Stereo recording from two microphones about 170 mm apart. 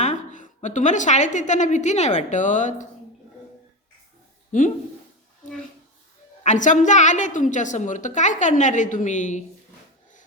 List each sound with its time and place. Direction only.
0.0 s a woman's voice: 45° left (ahead or behind)
4.5 s a woman's voice: 50° left (ahead or behind)
6.4 s a woman's voice: 45° left (ahead or behind)